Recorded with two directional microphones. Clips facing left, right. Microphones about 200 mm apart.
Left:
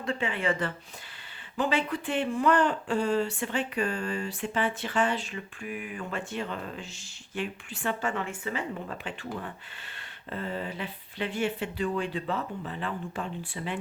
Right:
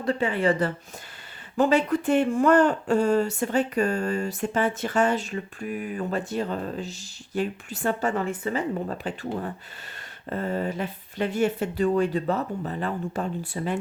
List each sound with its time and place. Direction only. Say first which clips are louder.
0.0 s speech: right 6 dB; 40° right (ahead or behind)